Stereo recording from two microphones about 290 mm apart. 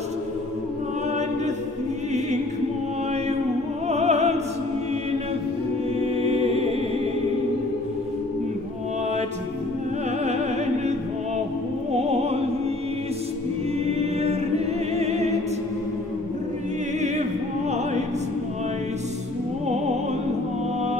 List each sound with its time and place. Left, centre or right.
3.9 s opera: right
5.9 s music: right
11.9 s opera: right
13.8 s music: right